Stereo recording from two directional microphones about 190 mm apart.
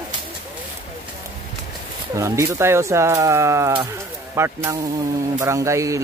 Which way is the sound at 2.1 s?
15° right (ahead or behind).